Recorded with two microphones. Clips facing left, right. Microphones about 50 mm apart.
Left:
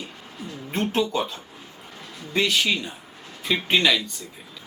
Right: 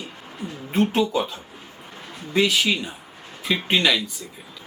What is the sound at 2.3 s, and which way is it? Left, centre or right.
Speech, centre.